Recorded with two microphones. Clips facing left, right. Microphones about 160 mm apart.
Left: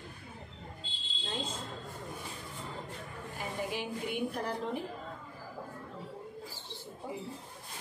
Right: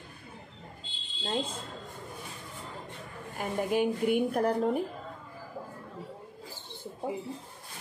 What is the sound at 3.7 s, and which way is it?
Speech, 50° right (ahead or behind).